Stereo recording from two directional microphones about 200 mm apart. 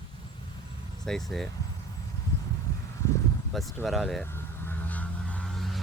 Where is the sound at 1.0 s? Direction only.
Centre (ahead or behind).